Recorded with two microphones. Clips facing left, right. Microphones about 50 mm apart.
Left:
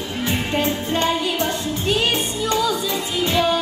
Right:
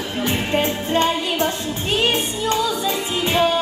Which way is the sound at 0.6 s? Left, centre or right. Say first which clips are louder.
Right 2 dB; right.